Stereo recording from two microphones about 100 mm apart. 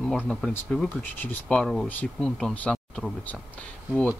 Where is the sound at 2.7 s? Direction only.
5° left (ahead or behind).